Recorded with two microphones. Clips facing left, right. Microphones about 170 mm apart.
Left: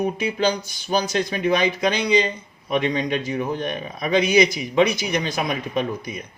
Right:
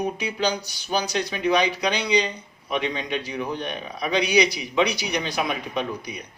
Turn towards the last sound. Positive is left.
turn(degrees=45)  # may be behind; listen again after turning